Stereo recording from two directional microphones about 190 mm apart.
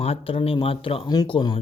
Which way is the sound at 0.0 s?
30° left (ahead or behind).